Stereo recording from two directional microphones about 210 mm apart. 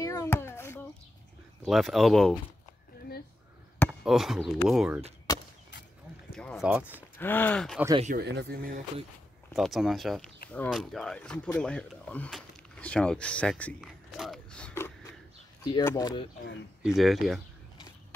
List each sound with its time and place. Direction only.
0.0 s a sound: 15° left (ahead or behind)
1.6 s speech: centre (ahead or behind)
4.0 s speech: centre (ahead or behind)
6.3 s speech: centre (ahead or behind)
7.2 s speech: 10° left (ahead or behind)
8.0 s speech: 45° right (ahead or behind)
9.6 s speech: centre (ahead or behind)
16.8 s speech: centre (ahead or behind)